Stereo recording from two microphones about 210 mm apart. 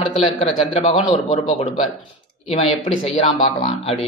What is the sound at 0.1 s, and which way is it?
A man's voice, 25° left (ahead or behind).